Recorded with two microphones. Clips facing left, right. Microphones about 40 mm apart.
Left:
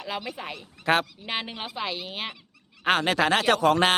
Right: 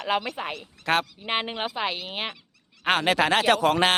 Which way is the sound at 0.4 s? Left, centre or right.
Right.